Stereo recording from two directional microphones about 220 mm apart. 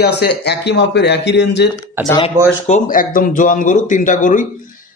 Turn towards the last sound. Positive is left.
turn(degrees=35)  # may be behind; listen again after turning